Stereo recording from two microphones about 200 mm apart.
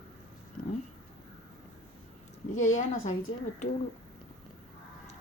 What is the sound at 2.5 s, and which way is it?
Speech, 80° left.